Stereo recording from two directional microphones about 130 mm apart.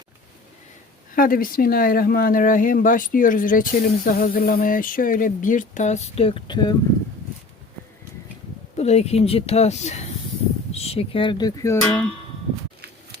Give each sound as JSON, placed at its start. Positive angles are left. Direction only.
{"t": 1.1, "sound": "speech", "side_deg": 90}
{"t": 8.8, "sound": "speech", "side_deg": 55}
{"t": 11.8, "sound": "speech", "side_deg": 10}